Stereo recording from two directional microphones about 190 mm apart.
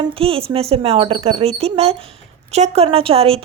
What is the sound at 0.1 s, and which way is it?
A woman's voice, 30° right (ahead or behind).